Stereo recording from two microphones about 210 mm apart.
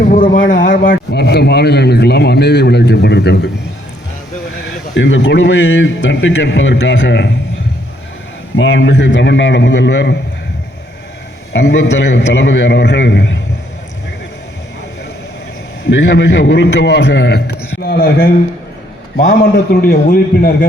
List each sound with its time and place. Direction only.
0.1 s speech: 40° left (ahead or behind)
4.9 s a man's voice: 60° left (ahead or behind)
8.5 s a man's voice: 60° left (ahead or behind)
11.5 s a man's voice: 55° left (ahead or behind)
15.8 s a man's voice: 60° left (ahead or behind)
19.7 s speech: 45° left (ahead or behind)